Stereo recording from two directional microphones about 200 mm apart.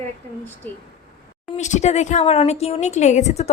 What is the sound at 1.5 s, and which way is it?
Speech, 35° left (ahead or behind).